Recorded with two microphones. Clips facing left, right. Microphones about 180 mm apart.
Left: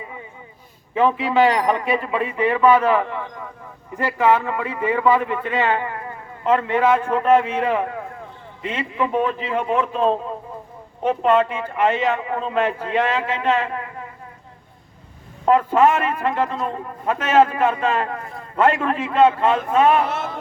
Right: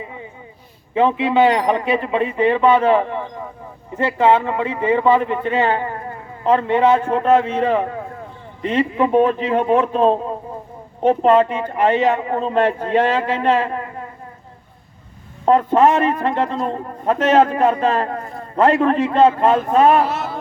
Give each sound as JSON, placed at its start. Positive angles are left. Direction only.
{"t": 0.9, "sound": "a man's voice", "side_deg": -25}
{"t": 15.4, "sound": "a man's voice", "side_deg": -35}